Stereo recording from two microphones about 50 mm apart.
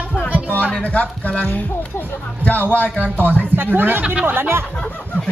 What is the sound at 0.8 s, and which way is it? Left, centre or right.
Speech, left.